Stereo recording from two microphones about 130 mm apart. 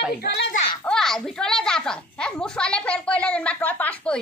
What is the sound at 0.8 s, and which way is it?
Speech, 5° left (ahead or behind).